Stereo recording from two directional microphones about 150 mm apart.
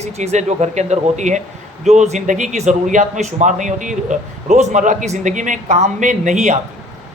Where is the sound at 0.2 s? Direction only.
50° right (ahead or behind).